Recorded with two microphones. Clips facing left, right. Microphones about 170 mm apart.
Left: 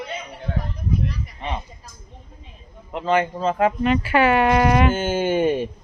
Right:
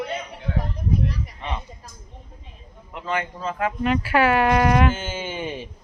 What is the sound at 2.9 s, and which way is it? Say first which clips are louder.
Speech: left 7 dB; 30° left (ahead or behind).